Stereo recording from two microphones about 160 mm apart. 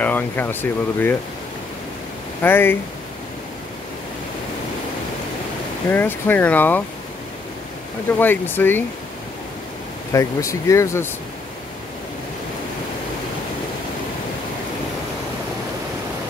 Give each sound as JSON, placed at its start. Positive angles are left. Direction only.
{"t": 0.0, "sound": "speech", "side_deg": 10}
{"t": 2.4, "sound": "speech", "side_deg": 15}
{"t": 5.9, "sound": "speech", "side_deg": 10}
{"t": 8.2, "sound": "speech", "side_deg": 10}
{"t": 10.1, "sound": "speech", "side_deg": 20}